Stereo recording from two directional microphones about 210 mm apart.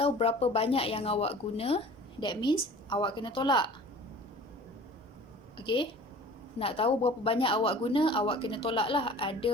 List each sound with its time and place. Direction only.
0.0 s speech: 30° left (ahead or behind)
5.5 s speech: 25° left (ahead or behind)